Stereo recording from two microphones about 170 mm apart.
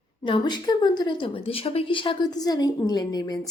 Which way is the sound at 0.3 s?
30° left (ahead or behind).